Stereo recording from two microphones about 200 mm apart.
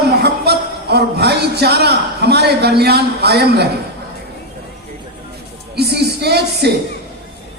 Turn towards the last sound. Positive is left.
turn(degrees=-55)  # may be behind; listen again after turning